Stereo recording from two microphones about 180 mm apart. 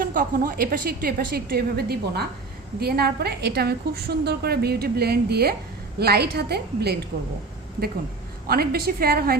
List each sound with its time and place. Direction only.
0.0 s a woman's voice: 50° right (ahead or behind)
8.4 s a woman's voice: 55° right (ahead or behind)